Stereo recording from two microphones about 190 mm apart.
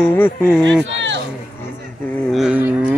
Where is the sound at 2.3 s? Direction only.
5° right (ahead or behind).